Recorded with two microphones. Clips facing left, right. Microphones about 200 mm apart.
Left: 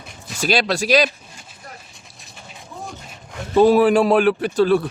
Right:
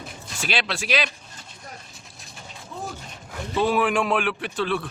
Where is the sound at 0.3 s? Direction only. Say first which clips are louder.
Left 8 dB; 40° left (ahead or behind).